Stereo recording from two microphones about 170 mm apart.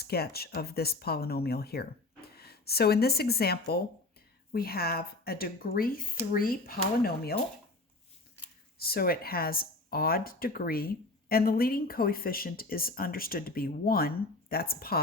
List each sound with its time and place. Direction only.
0.0 s speech: 65° left (ahead or behind)
8.8 s speech: 65° left (ahead or behind)